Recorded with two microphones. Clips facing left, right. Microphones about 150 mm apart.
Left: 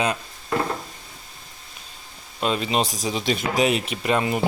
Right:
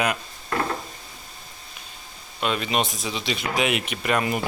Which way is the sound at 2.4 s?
30° left (ahead or behind).